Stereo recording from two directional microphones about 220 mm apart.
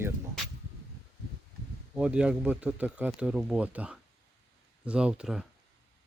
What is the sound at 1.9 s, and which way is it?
Speech, 5° right (ahead or behind).